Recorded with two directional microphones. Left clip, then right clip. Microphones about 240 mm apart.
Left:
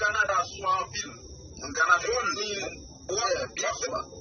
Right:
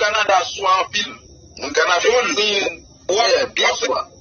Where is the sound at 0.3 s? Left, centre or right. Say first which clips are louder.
Right 11 dB; right.